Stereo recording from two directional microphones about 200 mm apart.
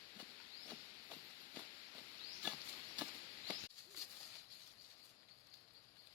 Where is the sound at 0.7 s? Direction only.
10° right (ahead or behind).